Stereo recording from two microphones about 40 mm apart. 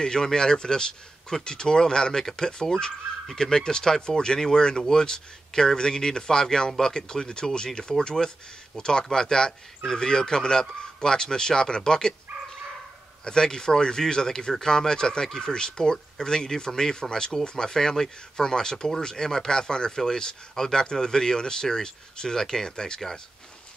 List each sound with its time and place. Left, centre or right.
0.0 s speech: centre
13.2 s speech: centre